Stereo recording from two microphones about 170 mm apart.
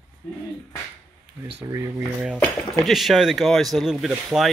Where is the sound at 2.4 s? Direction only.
Centre (ahead or behind).